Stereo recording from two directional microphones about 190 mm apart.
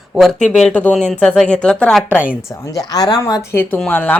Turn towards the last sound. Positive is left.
turn(degrees=10)  # may be behind; listen again after turning